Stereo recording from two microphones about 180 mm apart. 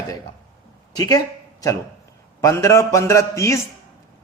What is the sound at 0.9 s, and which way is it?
Speech, 20° left (ahead or behind).